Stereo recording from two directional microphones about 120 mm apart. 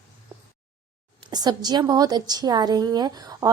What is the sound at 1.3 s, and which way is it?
A woman's voice, 35° right (ahead or behind).